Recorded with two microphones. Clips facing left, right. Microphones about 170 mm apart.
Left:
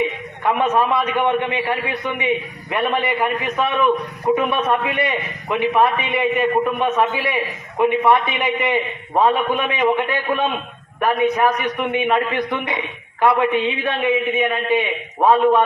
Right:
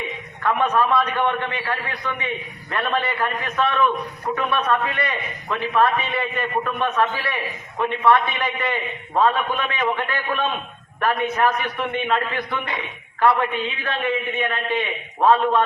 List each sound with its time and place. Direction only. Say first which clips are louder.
0.4 s a man's voice: left 2 dB; 20° left (ahead or behind)
11.4 s a man's voice: left 3 dB; 15° left (ahead or behind)